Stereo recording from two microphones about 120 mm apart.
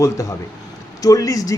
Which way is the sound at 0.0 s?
25° left (ahead or behind).